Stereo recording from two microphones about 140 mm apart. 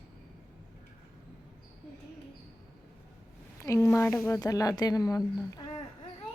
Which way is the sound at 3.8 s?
15° left (ahead or behind).